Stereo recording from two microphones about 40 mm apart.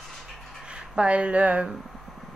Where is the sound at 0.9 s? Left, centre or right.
Right.